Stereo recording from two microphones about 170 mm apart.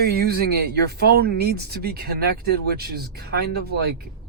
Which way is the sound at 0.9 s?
70° right (ahead or behind).